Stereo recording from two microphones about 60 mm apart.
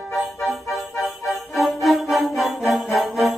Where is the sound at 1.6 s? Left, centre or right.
Centre.